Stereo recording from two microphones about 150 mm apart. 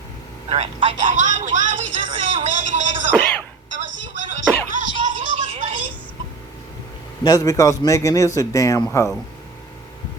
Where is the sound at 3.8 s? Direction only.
55° right (ahead or behind).